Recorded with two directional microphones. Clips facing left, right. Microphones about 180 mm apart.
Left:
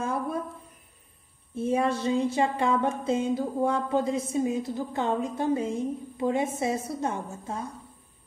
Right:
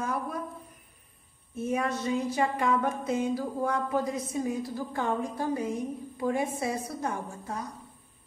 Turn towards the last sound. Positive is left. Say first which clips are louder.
# left 2 dB
turn(degrees=25)  # may be behind; listen again after turning